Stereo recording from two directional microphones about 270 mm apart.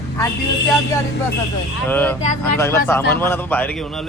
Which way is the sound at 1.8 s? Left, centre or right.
Centre.